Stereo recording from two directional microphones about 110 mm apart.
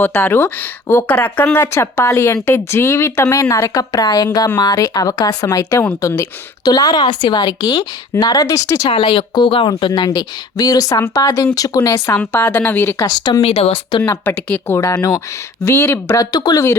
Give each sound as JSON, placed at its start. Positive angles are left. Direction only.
{"t": 0.0, "sound": "speech", "side_deg": 20}
{"t": 8.9, "sound": "speech", "side_deg": 55}
{"t": 12.0, "sound": "speech", "side_deg": 20}
{"t": 13.1, "sound": "speech", "side_deg": 40}
{"t": 13.4, "sound": "speech", "side_deg": 65}
{"t": 14.0, "sound": "speech", "side_deg": 15}
{"t": 14.9, "sound": "speech", "side_deg": 35}
{"t": 15.6, "sound": "speech", "side_deg": 25}